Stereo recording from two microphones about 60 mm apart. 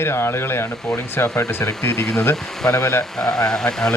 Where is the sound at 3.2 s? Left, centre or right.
Centre.